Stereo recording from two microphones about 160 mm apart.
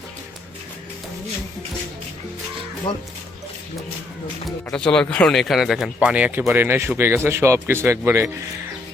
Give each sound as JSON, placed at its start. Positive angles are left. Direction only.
{"t": 2.9, "sound": "speech", "side_deg": 30}
{"t": 4.4, "sound": "speech", "side_deg": 5}